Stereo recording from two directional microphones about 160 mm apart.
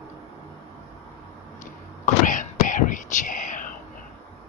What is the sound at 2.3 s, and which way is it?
Whispering, 55° left (ahead or behind).